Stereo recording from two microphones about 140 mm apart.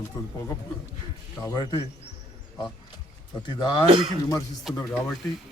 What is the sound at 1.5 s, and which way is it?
Speech, 25° left (ahead or behind).